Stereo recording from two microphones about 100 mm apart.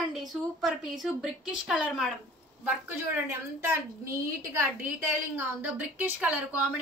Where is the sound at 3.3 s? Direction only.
25° right (ahead or behind).